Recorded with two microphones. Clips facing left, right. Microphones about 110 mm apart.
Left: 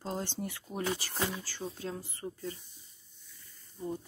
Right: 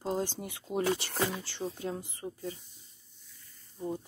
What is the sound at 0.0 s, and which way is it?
Speech, 15° right (ahead or behind).